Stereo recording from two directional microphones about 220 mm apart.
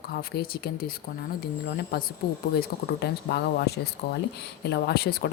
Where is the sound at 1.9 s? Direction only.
45° left (ahead or behind).